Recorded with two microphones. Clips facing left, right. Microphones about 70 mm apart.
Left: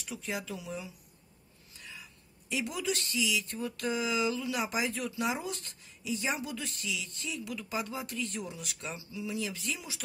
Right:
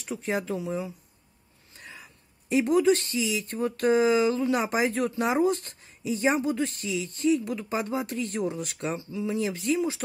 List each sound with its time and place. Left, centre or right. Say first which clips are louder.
0.0 s speech: right 8 dB; right
1.8 s a sound: right 3 dB; right
2.5 s speech: right 13 dB; right